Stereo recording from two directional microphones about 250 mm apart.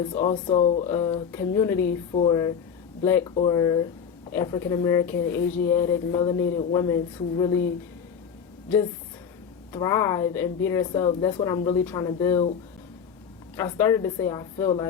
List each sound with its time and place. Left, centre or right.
0.1 s speech: left
9.7 s speech: centre
13.6 s speech: centre